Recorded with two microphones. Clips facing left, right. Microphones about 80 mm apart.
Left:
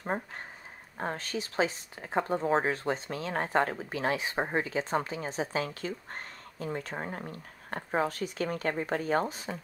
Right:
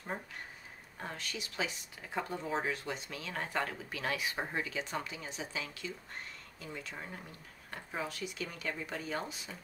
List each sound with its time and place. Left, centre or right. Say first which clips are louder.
0.0 s speech: left 7 dB; left